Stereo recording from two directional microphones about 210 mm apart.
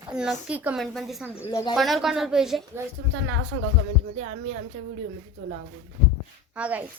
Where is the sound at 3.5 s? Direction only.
90° right.